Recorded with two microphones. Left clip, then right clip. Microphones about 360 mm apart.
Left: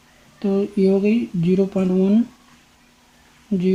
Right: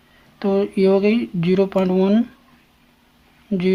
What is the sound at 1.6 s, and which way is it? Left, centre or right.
Speech, right.